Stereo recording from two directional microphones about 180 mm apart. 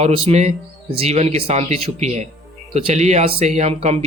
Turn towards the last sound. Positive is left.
turn(degrees=-40)  # may be behind; listen again after turning